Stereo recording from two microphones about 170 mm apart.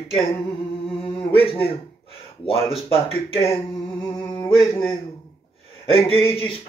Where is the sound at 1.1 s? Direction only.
35° left (ahead or behind).